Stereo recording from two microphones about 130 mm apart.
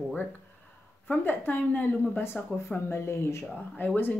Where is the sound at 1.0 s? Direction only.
15° left (ahead or behind).